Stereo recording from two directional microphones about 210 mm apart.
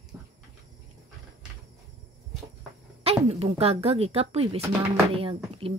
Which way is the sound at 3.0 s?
30° right (ahead or behind).